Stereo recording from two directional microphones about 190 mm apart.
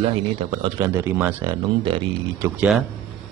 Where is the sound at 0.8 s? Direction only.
15° right (ahead or behind).